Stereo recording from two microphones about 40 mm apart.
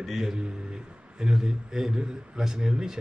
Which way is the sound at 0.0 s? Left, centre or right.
Centre.